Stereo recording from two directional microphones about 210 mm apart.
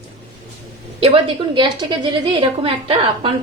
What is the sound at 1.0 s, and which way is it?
A woman's voice, 25° right (ahead or behind).